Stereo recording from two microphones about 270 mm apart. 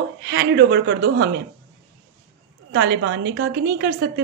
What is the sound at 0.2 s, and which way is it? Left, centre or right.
A woman's voice, right.